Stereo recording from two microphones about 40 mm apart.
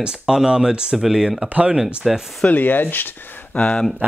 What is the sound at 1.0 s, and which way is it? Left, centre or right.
Speech, centre.